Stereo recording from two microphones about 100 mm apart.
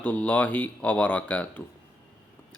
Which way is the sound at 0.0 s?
15° left (ahead or behind).